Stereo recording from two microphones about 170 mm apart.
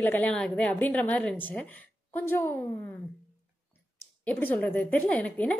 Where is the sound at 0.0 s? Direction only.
10° left (ahead or behind).